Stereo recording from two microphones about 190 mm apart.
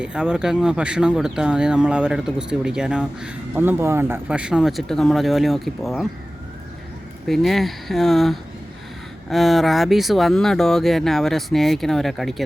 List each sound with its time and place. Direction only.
0.0 s speech: 5° right (ahead or behind)
7.3 s speech: centre (ahead or behind)